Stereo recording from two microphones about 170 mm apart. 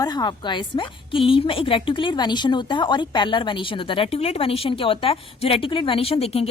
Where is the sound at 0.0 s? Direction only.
25° left (ahead or behind).